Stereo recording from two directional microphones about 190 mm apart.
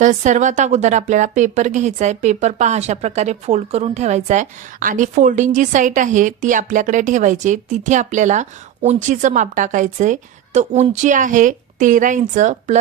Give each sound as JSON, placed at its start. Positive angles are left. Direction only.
{"t": 0.0, "sound": "a woman's voice", "side_deg": -40}